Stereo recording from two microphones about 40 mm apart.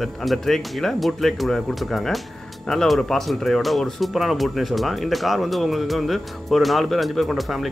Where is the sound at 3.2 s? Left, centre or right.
Centre.